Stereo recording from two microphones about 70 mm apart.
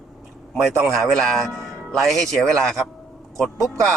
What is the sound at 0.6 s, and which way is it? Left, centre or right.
A man's voice, centre.